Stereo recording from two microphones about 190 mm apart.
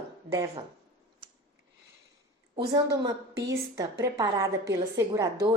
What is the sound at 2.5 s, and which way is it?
A woman's voice, 25° right (ahead or behind).